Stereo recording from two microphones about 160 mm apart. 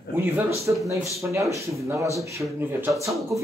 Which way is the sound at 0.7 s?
15° right (ahead or behind).